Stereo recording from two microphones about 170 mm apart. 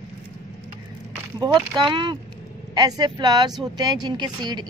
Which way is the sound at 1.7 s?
30° right (ahead or behind).